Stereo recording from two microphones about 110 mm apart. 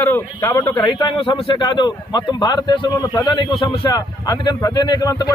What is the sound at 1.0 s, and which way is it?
A man's voice, 45° left (ahead or behind).